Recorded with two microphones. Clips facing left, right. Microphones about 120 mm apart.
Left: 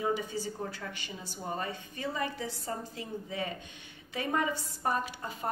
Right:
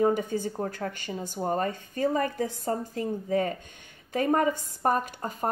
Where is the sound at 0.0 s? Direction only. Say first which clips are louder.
Right 7 dB; 50° right (ahead or behind).